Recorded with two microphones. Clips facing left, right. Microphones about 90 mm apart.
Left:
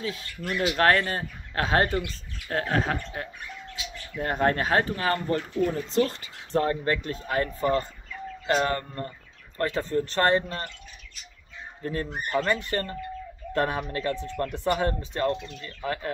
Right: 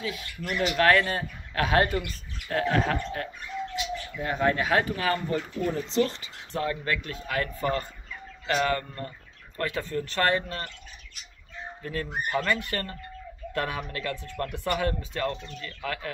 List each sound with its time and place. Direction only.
0.0 s speech: 35° left (ahead or behind)
4.2 s speech: 50° left (ahead or behind)
5.4 s speech: centre (ahead or behind)
5.9 s speech: 40° left (ahead or behind)
11.8 s speech: 30° left (ahead or behind)
12.1 s speech: 15° right (ahead or behind)
12.4 s speech: 25° left (ahead or behind)